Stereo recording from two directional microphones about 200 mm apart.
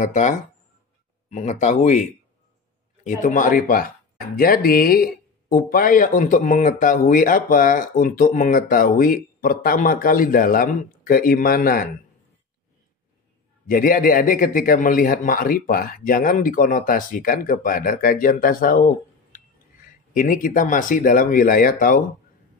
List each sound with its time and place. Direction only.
0.0 s speech: 40° left (ahead or behind)
13.7 s speech: 45° left (ahead or behind)
20.2 s speech: 45° left (ahead or behind)